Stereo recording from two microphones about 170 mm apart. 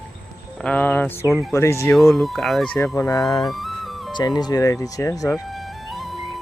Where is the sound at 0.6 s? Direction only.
10° left (ahead or behind).